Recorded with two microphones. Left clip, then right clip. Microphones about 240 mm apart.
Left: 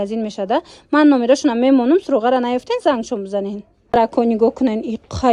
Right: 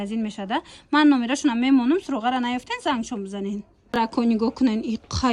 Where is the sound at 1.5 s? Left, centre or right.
Right.